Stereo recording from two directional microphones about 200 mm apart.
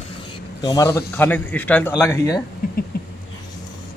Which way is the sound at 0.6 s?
15° left (ahead or behind).